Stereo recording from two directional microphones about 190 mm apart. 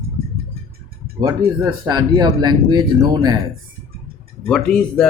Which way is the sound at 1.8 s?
20° right (ahead or behind).